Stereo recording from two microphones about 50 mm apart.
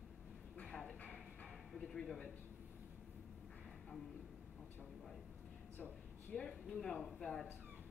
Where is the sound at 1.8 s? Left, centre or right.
Centre.